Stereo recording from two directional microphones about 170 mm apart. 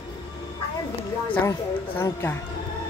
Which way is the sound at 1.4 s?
15° left (ahead or behind).